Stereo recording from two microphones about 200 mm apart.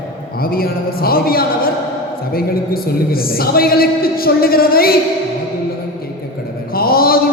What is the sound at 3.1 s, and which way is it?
A man's voice, 50° left (ahead or behind).